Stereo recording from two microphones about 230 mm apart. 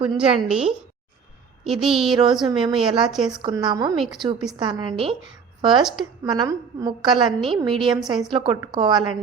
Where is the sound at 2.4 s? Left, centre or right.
Centre.